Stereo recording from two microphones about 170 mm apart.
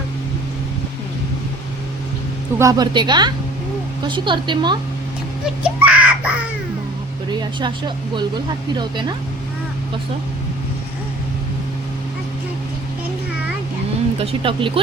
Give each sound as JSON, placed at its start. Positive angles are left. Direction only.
{"t": 2.6, "sound": "speech", "side_deg": -20}
{"t": 5.6, "sound": "a child's voice", "side_deg": -10}
{"t": 7.3, "sound": "speech", "side_deg": -25}
{"t": 14.2, "sound": "speech", "side_deg": -30}